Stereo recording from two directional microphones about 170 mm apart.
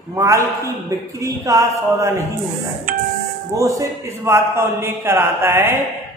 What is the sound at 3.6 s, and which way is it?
A man's voice, 15° right (ahead or behind).